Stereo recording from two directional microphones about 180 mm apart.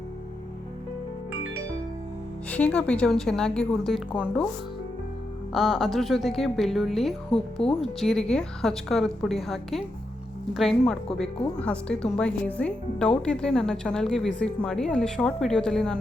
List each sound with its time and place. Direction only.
2.5 s a woman's voice: 5° left (ahead or behind)
5.5 s a woman's voice: centre (ahead or behind)
7.3 s speech: 30° left (ahead or behind)
7.9 s a woman's voice: centre (ahead or behind)